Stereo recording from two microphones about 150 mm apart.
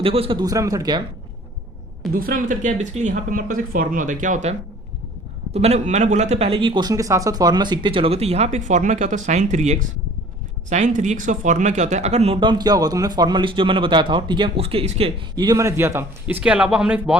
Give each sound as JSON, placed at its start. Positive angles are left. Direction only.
{"t": 0.0, "sound": "a man's voice", "side_deg": -40}
{"t": 2.1, "sound": "speech", "side_deg": -70}
{"t": 5.5, "sound": "a man's voice", "side_deg": -45}
{"t": 15.4, "sound": "speech", "side_deg": -25}